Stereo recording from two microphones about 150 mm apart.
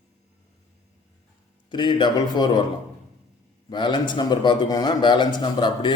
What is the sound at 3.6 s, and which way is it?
A man's voice, 30° left (ahead or behind).